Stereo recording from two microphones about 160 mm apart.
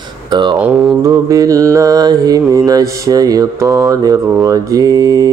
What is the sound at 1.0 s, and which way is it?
Mantra, 20° right (ahead or behind).